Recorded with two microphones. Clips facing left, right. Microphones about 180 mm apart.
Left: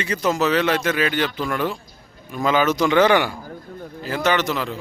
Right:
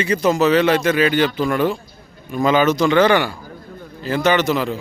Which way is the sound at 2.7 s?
15° left (ahead or behind).